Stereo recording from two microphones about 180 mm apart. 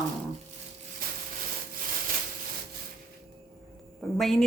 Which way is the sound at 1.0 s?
55° right (ahead or behind).